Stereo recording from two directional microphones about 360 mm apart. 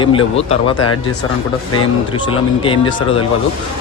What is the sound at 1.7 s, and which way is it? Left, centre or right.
A man's voice, centre.